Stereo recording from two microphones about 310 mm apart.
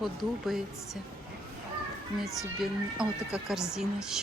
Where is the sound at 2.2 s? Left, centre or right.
Centre.